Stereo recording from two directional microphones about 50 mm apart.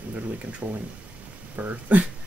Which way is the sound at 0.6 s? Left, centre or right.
Right.